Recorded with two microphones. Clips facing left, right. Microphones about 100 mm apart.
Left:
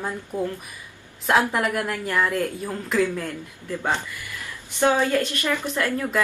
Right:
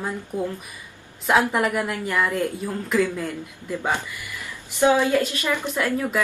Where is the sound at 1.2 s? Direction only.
Centre (ahead or behind).